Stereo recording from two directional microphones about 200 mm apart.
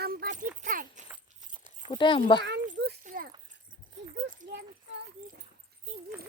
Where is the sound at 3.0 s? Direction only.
45° right (ahead or behind).